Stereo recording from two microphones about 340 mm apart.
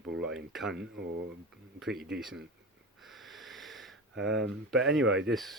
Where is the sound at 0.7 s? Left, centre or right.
Right.